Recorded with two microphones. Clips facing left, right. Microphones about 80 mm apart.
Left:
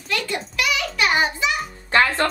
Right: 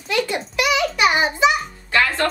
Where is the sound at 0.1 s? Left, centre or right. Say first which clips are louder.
Right 4 dB; right.